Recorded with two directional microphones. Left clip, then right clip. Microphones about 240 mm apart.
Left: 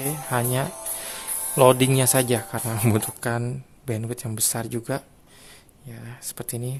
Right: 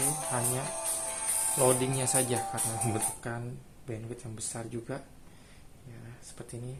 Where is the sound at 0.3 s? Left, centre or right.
Left.